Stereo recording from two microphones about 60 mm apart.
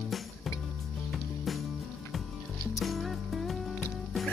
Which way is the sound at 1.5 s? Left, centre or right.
Centre.